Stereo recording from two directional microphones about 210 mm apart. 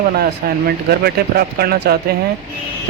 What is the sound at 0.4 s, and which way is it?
Speech, 45° right (ahead or behind).